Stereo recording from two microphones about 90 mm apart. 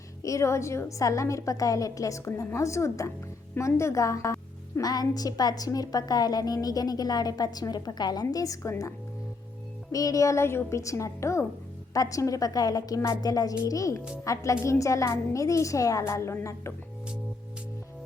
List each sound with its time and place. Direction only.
0.2 s a woman's voice: 35° left (ahead or behind)
4.8 s a woman's voice: 45° left (ahead or behind)
9.9 s a woman's voice: 40° left (ahead or behind)